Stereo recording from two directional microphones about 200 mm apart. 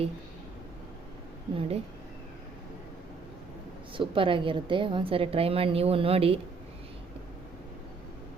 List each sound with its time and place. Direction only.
1.5 s a woman's voice: 30° right (ahead or behind)
3.9 s a woman's voice: 25° right (ahead or behind)